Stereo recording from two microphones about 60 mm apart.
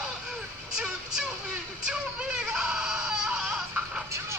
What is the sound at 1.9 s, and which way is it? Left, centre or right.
Baby cry, centre.